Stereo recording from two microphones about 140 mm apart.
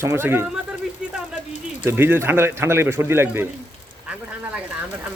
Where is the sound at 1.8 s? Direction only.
15° right (ahead or behind).